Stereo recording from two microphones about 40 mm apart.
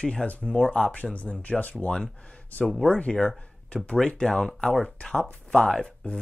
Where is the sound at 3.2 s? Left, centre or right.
Centre.